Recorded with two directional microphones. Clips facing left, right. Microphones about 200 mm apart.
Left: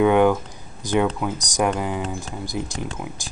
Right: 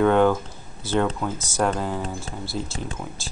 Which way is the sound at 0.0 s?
15° left (ahead or behind).